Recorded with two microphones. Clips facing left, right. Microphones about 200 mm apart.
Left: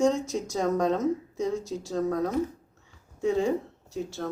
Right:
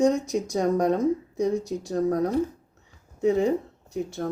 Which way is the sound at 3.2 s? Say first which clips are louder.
Right 3 dB; 20° right (ahead or behind).